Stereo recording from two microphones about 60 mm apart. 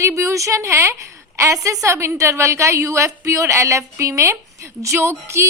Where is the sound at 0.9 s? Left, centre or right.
Right.